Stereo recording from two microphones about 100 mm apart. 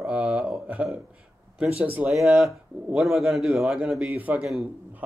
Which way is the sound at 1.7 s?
75° right (ahead or behind).